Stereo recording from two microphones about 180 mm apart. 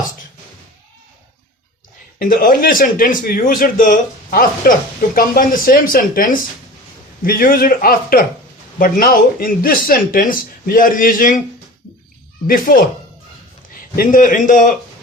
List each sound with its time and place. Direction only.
2.1 s speech: 55° left (ahead or behind)
12.5 s speech: 50° left (ahead or behind)
13.9 s speech: 50° left (ahead or behind)